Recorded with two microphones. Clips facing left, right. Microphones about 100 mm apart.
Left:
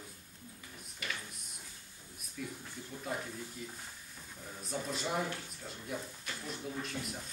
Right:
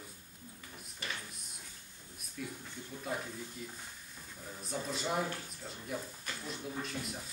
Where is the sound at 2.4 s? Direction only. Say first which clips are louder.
Even; centre (ahead or behind).